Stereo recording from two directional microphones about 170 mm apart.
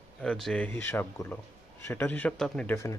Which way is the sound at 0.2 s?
5° left (ahead or behind).